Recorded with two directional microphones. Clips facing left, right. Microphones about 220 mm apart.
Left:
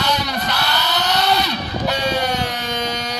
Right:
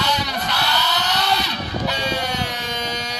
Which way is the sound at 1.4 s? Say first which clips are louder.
Left 3 dB; 50° left (ahead or behind).